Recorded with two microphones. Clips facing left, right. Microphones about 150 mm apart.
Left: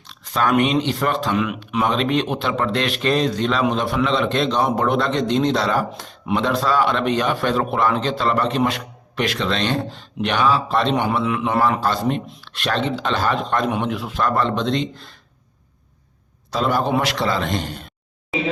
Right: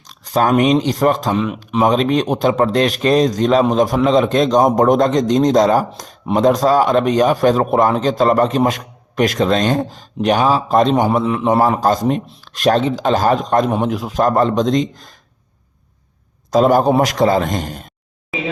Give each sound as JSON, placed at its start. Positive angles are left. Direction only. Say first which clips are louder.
{"t": 0.0, "sound": "a man's voice", "louder": "right 5 dB", "side_deg": -40}
{"t": 16.5, "sound": "a man's voice", "louder": "right 8 dB", "side_deg": -45}